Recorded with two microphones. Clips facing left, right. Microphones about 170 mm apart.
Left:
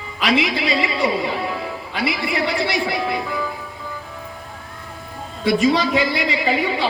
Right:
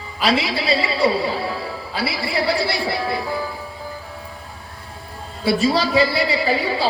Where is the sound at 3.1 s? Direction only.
30° right (ahead or behind).